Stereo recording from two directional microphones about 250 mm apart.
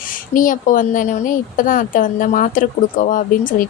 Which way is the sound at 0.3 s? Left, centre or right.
Left.